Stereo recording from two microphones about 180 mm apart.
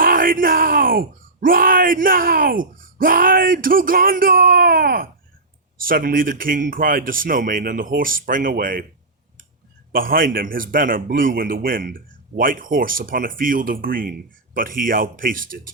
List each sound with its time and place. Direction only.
0.0 s a man's voice: 50° right (ahead or behind)
9.9 s a man's voice: 50° right (ahead or behind)